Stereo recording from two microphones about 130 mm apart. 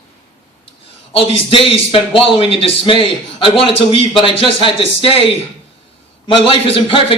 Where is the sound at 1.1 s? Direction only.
45° left (ahead or behind).